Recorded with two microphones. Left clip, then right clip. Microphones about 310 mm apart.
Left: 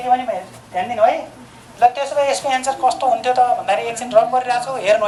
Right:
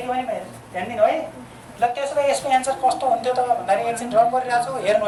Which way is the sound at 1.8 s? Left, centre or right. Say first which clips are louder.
Left 5 dB; left.